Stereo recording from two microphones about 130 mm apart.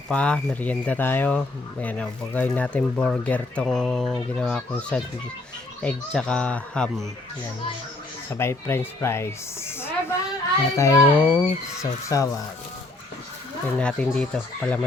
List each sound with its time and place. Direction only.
0.1 s speech: 10° left (ahead or behind)
8.3 s a woman's voice: 20° left (ahead or behind)
13.7 s speech: 10° left (ahead or behind)